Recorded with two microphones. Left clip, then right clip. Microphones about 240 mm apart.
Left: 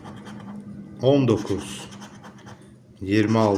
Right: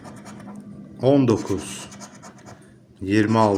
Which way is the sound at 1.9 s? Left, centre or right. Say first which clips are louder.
Right 1 dB; right.